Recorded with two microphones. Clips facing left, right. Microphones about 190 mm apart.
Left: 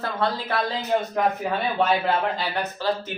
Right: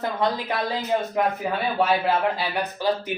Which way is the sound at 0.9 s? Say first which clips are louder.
Left 1 dB; 5° right (ahead or behind).